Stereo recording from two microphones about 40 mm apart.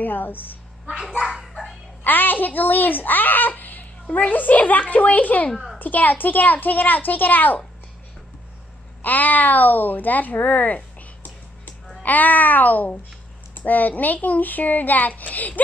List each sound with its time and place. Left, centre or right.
0.0 s a woman's voice: left
2.0 s a woman's voice: left
9.0 s a woman's voice: left